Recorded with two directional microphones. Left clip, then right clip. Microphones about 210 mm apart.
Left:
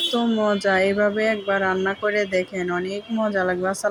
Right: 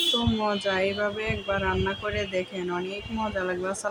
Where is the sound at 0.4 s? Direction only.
20° left (ahead or behind).